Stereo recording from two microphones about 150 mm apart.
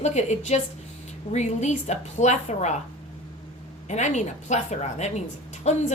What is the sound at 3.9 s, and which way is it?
A woman's voice, 50° left (ahead or behind).